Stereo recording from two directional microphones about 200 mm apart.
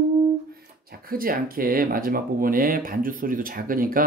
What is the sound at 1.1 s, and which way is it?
Speech, 45° right (ahead or behind).